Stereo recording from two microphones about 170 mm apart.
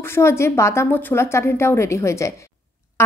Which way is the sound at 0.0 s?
15° left (ahead or behind).